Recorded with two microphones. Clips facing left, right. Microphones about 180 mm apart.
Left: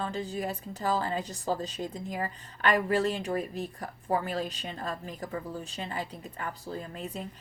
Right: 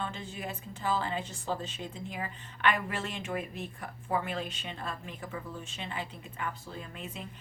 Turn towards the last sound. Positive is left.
turn(degrees=40)  # may be behind; listen again after turning